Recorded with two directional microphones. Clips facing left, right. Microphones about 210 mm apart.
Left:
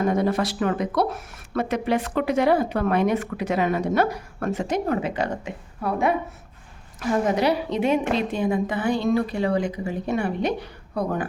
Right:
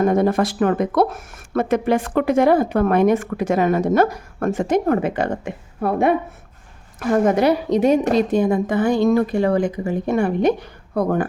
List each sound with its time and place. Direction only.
0.0 s speech: 50° right (ahead or behind)